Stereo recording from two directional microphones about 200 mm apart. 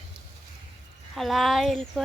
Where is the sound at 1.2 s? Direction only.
Centre (ahead or behind).